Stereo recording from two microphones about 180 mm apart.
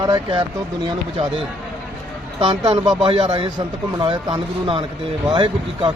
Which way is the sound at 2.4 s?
30° right (ahead or behind).